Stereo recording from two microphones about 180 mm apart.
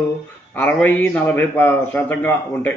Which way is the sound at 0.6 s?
10° left (ahead or behind).